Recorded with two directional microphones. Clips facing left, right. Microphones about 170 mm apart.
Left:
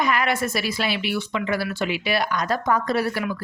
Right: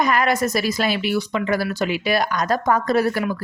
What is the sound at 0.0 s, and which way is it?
A woman's voice, 45° right (ahead or behind).